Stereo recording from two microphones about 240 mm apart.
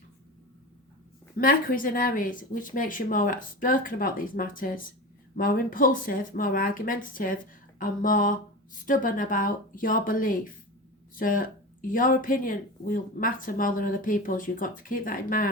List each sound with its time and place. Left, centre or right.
1.4 s speech: left